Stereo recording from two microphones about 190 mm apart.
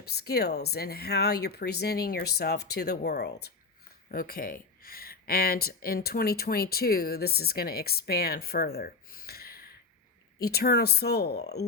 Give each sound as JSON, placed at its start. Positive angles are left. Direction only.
{"t": 0.3, "sound": "speech", "side_deg": 55}